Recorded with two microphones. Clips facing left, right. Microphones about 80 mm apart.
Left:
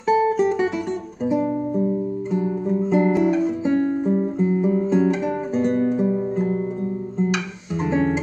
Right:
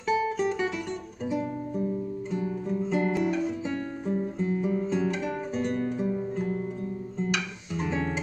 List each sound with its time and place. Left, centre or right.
0.0 s music: left
7.2 s guitar: centre